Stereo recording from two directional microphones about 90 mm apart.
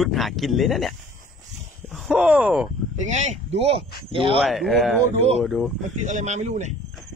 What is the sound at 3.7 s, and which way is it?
Speech, 90° right.